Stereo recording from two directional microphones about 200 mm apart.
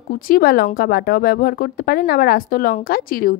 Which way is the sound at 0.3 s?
50° left (ahead or behind).